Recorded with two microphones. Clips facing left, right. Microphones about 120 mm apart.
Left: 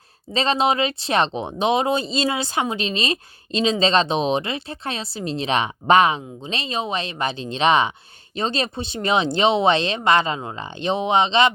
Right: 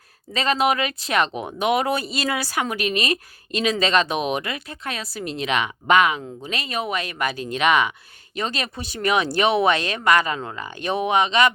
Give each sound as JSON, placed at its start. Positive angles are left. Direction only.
{"t": 0.3, "sound": "speech", "side_deg": 25}